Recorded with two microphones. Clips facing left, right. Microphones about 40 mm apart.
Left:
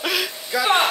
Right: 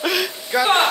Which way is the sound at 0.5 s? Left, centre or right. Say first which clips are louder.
Right 3 dB; right.